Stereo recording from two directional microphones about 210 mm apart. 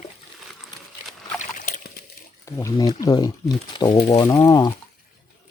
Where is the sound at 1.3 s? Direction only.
40° left (ahead or behind).